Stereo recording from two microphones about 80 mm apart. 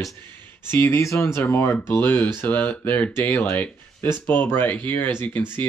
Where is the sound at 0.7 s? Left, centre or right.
Left.